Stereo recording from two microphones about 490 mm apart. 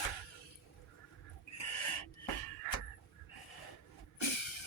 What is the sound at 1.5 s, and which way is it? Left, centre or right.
Owl, left.